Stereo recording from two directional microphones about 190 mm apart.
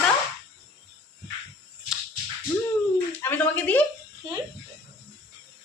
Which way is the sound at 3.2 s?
10° left (ahead or behind).